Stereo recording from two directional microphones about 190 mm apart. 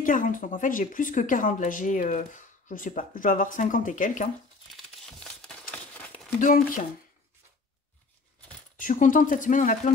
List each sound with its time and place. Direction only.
0.0 s a woman's voice: 45° left (ahead or behind)
4.7 s crumpling: centre (ahead or behind)
6.4 s a woman's voice: 45° left (ahead or behind)
8.7 s a woman's voice: 45° left (ahead or behind)